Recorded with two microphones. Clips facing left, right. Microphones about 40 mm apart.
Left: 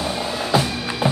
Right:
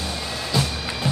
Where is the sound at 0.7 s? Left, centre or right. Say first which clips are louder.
Left 3 dB; centre.